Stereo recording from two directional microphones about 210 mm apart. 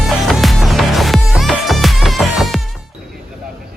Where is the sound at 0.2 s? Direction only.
Centre (ahead or behind).